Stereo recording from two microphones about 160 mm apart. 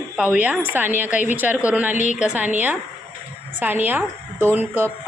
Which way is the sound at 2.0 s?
50° left (ahead or behind).